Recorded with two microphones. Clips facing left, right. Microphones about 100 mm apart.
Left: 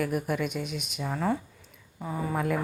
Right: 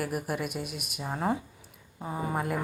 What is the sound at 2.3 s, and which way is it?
Speech, 5° right (ahead or behind).